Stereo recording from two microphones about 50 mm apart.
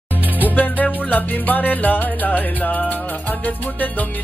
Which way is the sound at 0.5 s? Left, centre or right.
Left.